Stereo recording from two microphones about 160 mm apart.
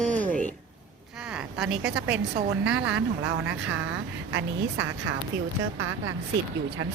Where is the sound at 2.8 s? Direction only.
90° right.